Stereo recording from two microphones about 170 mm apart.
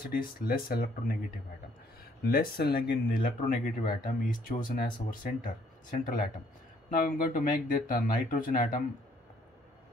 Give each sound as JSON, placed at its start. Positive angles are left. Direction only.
{"t": 0.0, "sound": "speech", "side_deg": 60}
{"t": 2.2, "sound": "speech", "side_deg": 65}